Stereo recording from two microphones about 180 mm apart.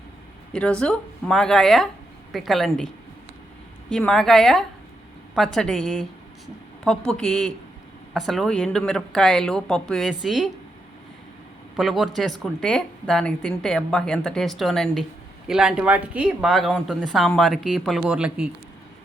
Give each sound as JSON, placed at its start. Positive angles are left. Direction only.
{"t": 0.5, "sound": "speech", "side_deg": 5}
{"t": 3.9, "sound": "speech", "side_deg": 5}
{"t": 11.8, "sound": "speech", "side_deg": 0}